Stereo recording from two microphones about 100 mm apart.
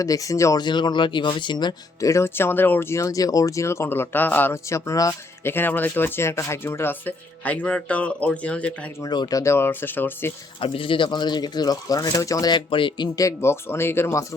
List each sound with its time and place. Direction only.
0.0 s speech: 35° left (ahead or behind)
0.6 s speech: 50° left (ahead or behind)
2.0 s speech: 30° left (ahead or behind); by 8.7 s 15° left (ahead or behind)
9.0 s speech: 45° left (ahead or behind)
9.4 s speech: 25° left (ahead or behind)
10.6 s speech: 60° left (ahead or behind)
13.1 s speech: 30° left (ahead or behind)